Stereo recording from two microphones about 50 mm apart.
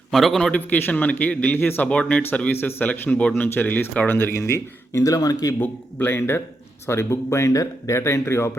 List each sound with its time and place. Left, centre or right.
0.1 s a man's voice: centre
0.5 s a man's voice: left
1.5 s a man's voice: left
2.5 s a man's voice: left
5.5 s a man's voice: left
6.8 s speech: left